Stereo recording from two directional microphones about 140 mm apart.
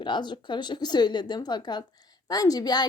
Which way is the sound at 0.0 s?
35° left (ahead or behind).